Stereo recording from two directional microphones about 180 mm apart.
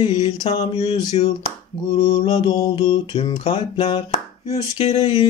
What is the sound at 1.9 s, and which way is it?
Mantra, 20° left (ahead or behind).